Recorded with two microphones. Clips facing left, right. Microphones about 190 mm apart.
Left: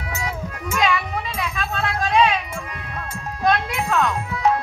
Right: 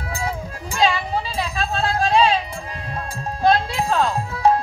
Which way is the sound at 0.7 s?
30° right (ahead or behind).